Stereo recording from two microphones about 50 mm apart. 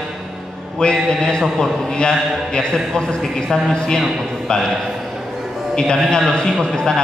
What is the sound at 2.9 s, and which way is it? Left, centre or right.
A man's voice, centre.